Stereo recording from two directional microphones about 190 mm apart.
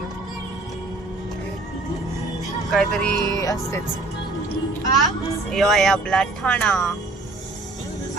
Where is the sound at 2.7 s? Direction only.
Centre (ahead or behind).